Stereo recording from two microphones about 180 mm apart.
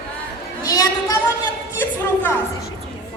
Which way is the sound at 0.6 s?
20° left (ahead or behind).